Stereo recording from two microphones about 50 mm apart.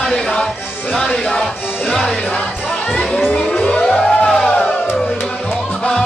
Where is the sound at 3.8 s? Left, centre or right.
Centre.